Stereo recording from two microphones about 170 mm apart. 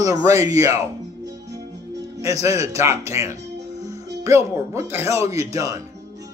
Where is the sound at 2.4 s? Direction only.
20° right (ahead or behind).